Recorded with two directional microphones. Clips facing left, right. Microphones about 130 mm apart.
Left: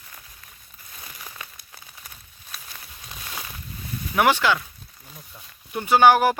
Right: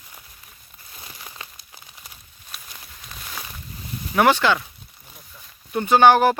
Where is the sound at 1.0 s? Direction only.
25° right (ahead or behind).